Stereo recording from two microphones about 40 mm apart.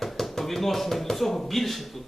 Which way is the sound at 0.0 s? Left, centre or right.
Centre.